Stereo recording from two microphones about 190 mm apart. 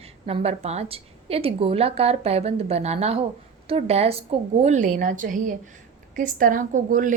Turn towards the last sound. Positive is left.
turn(degrees=-45)  # may be behind; listen again after turning